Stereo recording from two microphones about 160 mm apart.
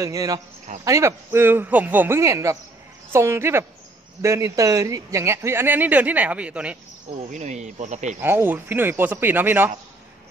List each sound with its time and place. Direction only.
0.0 s speech: 20° right (ahead or behind)
7.2 s speech: 50° right (ahead or behind)
8.2 s speech: 10° right (ahead or behind)